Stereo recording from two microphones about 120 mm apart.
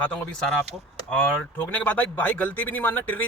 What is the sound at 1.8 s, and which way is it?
A man's voice, 15° left (ahead or behind).